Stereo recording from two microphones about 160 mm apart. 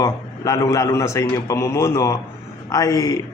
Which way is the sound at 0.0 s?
20° left (ahead or behind).